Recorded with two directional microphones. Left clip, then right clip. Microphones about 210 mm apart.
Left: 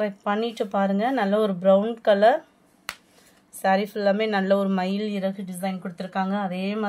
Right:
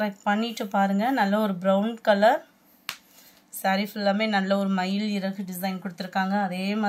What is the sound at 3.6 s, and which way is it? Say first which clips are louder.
Speech: left 4 dB; 50° left (ahead or behind).